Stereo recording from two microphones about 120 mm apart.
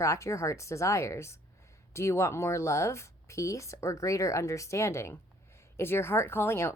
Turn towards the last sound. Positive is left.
turn(degrees=20)  # may be behind; listen again after turning